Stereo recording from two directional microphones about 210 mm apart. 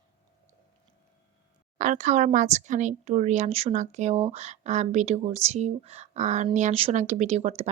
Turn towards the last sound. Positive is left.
turn(degrees=-30)  # may be behind; listen again after turning